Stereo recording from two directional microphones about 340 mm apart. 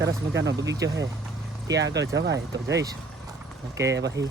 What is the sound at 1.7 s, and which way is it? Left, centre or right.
Speech, right.